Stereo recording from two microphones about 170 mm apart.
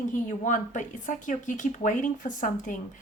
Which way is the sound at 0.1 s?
50° left (ahead or behind).